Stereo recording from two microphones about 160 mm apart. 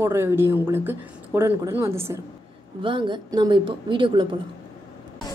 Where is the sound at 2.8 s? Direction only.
30° right (ahead or behind).